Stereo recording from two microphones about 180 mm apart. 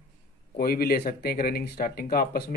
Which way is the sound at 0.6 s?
55° left (ahead or behind).